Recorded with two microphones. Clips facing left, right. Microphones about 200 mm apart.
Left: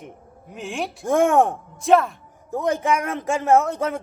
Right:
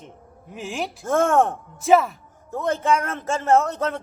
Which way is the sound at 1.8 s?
Centre (ahead or behind).